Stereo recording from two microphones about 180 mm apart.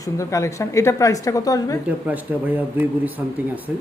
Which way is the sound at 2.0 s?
10° right (ahead or behind).